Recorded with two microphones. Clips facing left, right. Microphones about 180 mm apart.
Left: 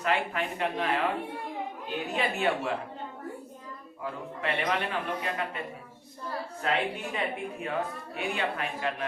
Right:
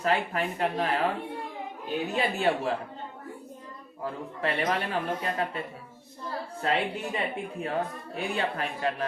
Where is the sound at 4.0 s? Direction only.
40° right (ahead or behind).